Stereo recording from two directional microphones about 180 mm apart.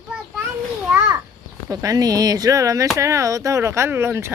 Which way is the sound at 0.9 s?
10° right (ahead or behind).